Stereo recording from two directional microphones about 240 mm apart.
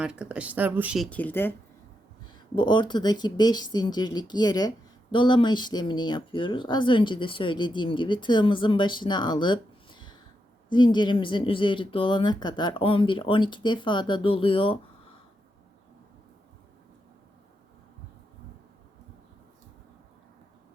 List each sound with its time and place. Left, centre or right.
0.0 s speech: centre
2.6 s speech: centre